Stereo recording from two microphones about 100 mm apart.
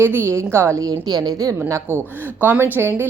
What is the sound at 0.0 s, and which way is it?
A woman's voice, 25° right (ahead or behind).